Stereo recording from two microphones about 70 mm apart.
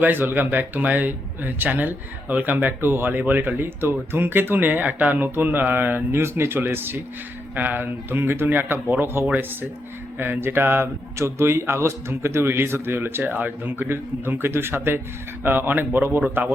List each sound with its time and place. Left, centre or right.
0.0 s speech: right